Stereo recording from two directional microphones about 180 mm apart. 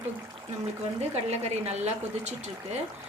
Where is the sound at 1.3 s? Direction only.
35° right (ahead or behind).